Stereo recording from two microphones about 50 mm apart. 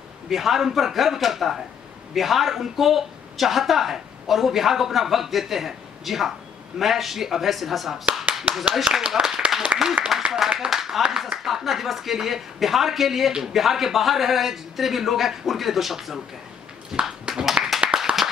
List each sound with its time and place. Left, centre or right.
0.3 s speech: centre
8.5 s speech: right
9.0 s speech: centre
9.7 s speech: right
10.1 s speech: centre
17.3 s clapping: centre